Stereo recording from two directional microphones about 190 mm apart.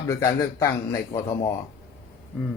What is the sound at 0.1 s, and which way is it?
Speech, 15° left (ahead or behind).